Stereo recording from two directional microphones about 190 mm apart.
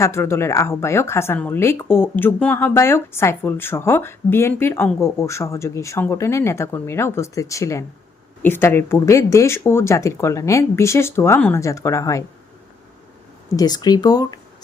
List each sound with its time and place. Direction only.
0.0 s speech: 15° left (ahead or behind)
13.6 s speech: 20° left (ahead or behind)